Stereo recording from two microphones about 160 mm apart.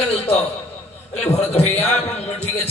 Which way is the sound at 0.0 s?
40° left (ahead or behind).